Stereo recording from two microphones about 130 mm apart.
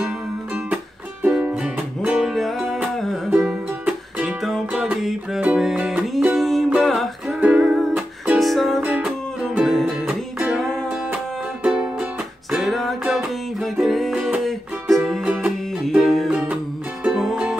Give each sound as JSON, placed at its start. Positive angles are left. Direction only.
{"t": 1.2, "sound": "music", "side_deg": -10}